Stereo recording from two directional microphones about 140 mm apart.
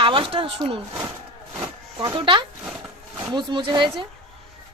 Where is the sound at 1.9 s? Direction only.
35° right (ahead or behind).